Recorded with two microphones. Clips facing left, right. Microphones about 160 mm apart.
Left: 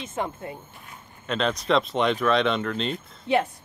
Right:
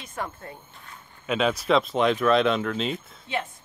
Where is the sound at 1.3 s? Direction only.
5° right (ahead or behind).